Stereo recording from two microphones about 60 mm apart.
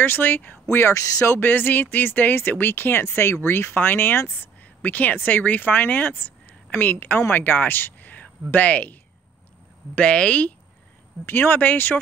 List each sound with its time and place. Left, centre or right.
0.0 s speech: left
0.7 s speech: left
9.9 s speech: centre
11.2 s speech: left